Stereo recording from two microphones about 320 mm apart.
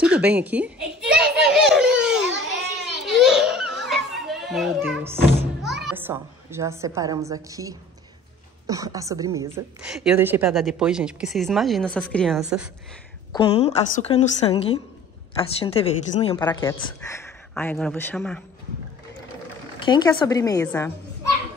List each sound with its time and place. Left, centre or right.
0.0 s a sound: centre
1.4 s children playing: centre
8.6 s a woman's voice: centre
13.3 s a woman's voice: centre
19.8 s a woman's voice: centre